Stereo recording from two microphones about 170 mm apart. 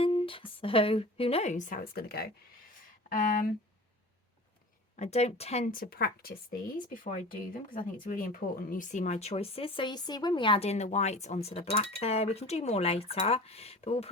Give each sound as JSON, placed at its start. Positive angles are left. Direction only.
{"t": 0.0, "sound": "speech", "side_deg": 30}
{"t": 3.1, "sound": "speech", "side_deg": 50}
{"t": 4.9, "sound": "speech", "side_deg": 40}
{"t": 5.7, "sound": "speech", "side_deg": 60}